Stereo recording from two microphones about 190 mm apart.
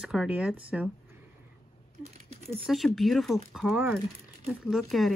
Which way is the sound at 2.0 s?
35° right (ahead or behind).